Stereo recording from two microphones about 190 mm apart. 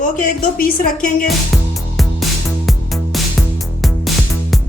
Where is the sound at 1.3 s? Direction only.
Centre (ahead or behind).